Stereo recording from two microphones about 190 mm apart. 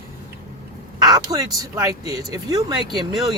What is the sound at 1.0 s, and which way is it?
Speech, 20° right (ahead or behind).